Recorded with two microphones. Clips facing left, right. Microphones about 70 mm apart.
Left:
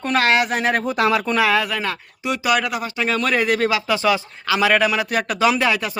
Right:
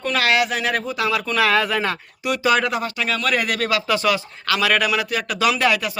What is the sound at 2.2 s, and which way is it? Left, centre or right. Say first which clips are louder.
Speech: right 2 dB; centre.